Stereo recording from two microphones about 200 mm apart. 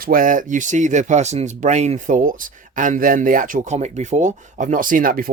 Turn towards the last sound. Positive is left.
turn(degrees=-45)  # may be behind; listen again after turning